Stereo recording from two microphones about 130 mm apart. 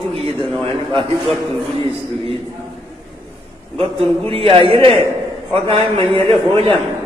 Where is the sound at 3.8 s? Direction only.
45° right (ahead or behind).